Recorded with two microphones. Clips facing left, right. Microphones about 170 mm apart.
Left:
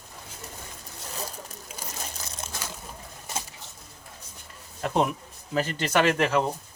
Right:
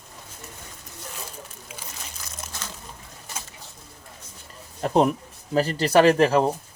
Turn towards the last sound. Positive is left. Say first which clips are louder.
# right 6 dB
turn(degrees=-35)  # may be behind; listen again after turning